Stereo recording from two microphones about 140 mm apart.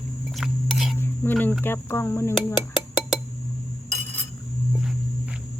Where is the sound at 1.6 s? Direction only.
20° left (ahead or behind).